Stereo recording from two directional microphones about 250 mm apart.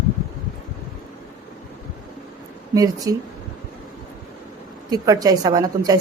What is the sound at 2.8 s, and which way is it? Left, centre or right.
Speech, centre.